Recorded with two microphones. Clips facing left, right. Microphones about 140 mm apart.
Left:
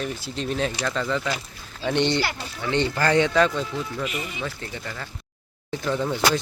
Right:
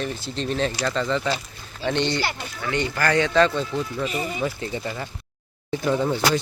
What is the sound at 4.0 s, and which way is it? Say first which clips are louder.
Speech: right 4 dB; 35° right (ahead or behind).